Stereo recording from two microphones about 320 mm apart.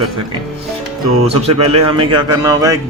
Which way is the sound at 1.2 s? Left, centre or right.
Centre.